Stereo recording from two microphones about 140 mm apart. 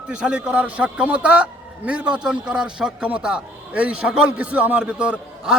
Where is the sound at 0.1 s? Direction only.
10° right (ahead or behind).